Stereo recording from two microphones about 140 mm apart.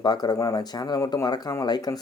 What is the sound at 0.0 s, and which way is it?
Speech, 30° left (ahead or behind).